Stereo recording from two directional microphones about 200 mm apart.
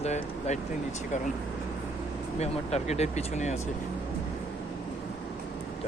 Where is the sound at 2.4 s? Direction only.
35° left (ahead or behind).